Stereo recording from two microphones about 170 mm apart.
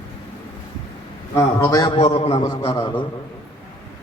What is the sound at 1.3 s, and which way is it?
Speech, 20° left (ahead or behind).